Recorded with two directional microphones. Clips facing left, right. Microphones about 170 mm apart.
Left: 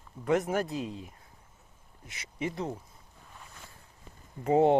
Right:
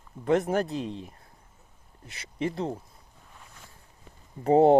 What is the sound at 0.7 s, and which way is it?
Speech, 15° left (ahead or behind).